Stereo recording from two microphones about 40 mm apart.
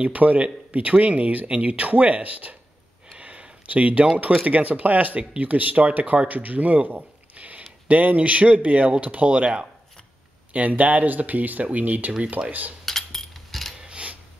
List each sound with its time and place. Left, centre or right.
0.0 s speech: right
3.2 s a sound: right
4.4 s speech: right
10.5 s speech: right
12.8 s a sound: centre
13.7 s mechanisms: right